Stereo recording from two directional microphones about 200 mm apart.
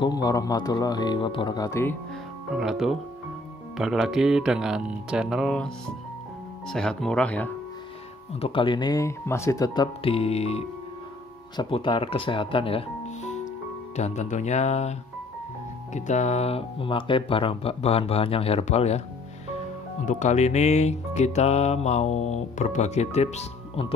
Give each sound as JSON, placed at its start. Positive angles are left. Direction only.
{"t": 0.0, "sound": "speech", "side_deg": 20}
{"t": 2.5, "sound": "speech", "side_deg": 0}
{"t": 8.4, "sound": "speech", "side_deg": 25}
{"t": 20.1, "sound": "speech", "side_deg": 35}